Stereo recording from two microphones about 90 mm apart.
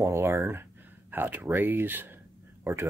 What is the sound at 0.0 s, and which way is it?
Speech, 30° right (ahead or behind).